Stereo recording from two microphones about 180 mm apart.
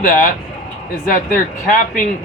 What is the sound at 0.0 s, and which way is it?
Speech, 50° left (ahead or behind).